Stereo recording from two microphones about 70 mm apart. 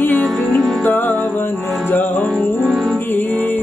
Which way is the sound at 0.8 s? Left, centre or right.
Left.